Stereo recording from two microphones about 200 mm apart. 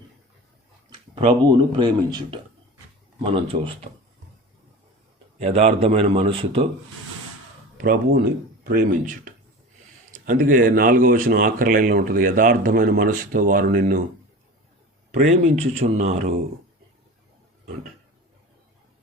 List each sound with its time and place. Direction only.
0.9 s a man's voice: 25° right (ahead or behind)
5.4 s a man's voice: 30° right (ahead or behind)
7.8 s speech: 50° right (ahead or behind)
15.1 s speech: 35° right (ahead or behind)